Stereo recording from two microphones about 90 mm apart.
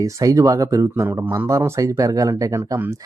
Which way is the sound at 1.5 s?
35° right (ahead or behind).